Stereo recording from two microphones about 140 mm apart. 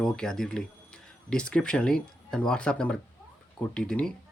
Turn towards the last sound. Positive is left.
turn(degrees=5)  # may be behind; listen again after turning